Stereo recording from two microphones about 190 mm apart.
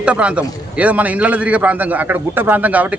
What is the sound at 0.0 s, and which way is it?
A man's voice, 5° right (ahead or behind).